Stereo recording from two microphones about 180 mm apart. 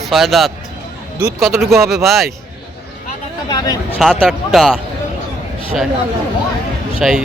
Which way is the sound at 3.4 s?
20° left (ahead or behind).